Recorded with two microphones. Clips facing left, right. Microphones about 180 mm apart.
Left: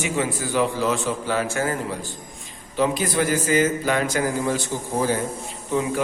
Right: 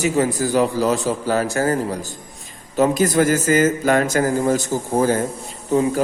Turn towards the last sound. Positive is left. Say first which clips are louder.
# right 6 dB
turn(degrees=-40)  # may be behind; listen again after turning